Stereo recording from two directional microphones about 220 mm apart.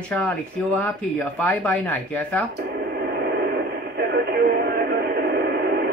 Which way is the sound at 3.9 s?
45° right (ahead or behind).